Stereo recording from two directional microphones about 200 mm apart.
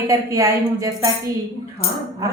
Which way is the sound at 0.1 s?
15° right (ahead or behind).